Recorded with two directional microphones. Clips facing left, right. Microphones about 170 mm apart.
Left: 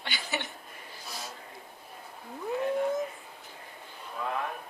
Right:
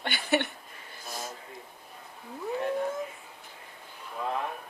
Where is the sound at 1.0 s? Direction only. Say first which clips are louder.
Right 4 dB; 50° right (ahead or behind).